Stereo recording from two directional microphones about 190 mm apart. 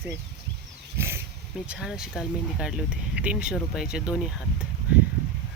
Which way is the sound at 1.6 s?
5° right (ahead or behind).